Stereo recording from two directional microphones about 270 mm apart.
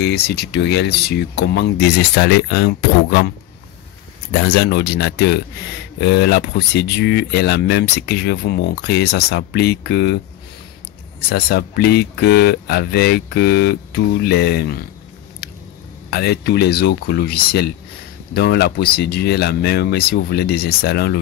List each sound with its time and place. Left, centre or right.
0.0 s speech: left
11.2 s speech: left
16.1 s speech: left